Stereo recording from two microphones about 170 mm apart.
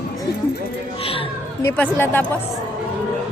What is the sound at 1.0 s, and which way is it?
Speech, 35° left (ahead or behind).